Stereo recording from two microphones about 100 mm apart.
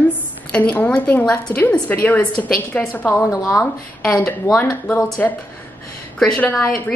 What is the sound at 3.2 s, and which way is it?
Speech, 35° left (ahead or behind).